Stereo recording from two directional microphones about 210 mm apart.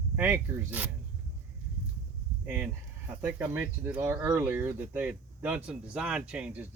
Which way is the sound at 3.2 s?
10° right (ahead or behind).